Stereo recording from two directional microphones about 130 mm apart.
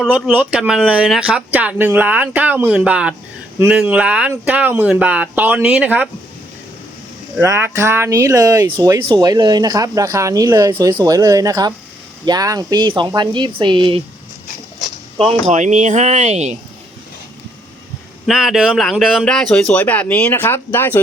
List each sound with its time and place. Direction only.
0.1 s speech: 10° right (ahead or behind)
7.3 s speech: 20° right (ahead or behind); by 14.0 s 40° right (ahead or behind)
15.4 s speech: 65° right (ahead or behind)
18.3 s a man's voice: 5° right (ahead or behind); by 21.0 s 15° left (ahead or behind)